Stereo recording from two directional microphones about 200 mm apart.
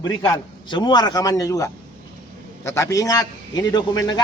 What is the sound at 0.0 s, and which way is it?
A man's voice, 20° left (ahead or behind).